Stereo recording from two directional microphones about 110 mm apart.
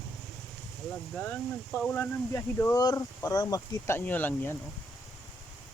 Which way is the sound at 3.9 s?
20° left (ahead or behind).